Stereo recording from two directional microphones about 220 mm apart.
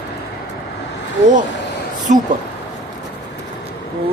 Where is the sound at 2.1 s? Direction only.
35° right (ahead or behind).